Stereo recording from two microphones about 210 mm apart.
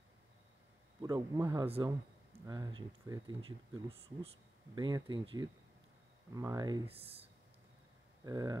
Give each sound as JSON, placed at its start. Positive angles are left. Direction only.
{"t": 1.0, "sound": "speech", "side_deg": -20}